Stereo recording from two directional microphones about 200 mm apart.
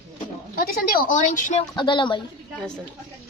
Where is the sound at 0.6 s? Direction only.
45° left (ahead or behind).